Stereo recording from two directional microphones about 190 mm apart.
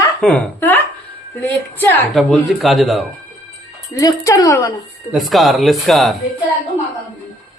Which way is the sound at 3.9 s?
15° left (ahead or behind).